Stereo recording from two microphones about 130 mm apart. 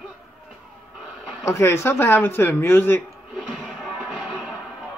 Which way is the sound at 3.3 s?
Centre (ahead or behind).